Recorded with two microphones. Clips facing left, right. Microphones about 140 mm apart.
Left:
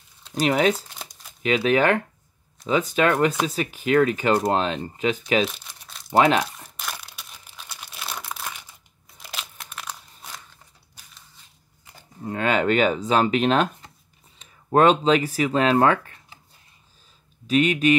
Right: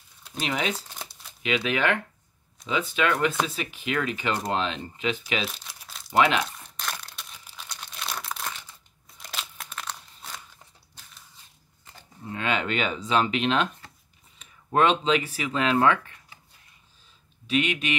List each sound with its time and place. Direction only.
0.3 s speech: 40° left (ahead or behind)
0.7 s speech: 10° left (ahead or behind)
1.4 s speech: 40° left (ahead or behind)
5.7 s crumpling: centre (ahead or behind)
9.2 s crunch: centre (ahead or behind)
12.3 s speech: 45° left (ahead or behind)
14.7 s speech: 40° left (ahead or behind)
17.5 s speech: 40° left (ahead or behind)